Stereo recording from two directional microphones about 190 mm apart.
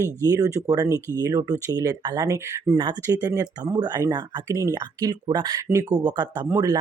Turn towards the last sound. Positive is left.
turn(degrees=-20)  # may be behind; listen again after turning